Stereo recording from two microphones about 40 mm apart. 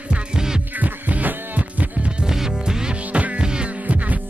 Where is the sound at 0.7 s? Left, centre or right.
Right.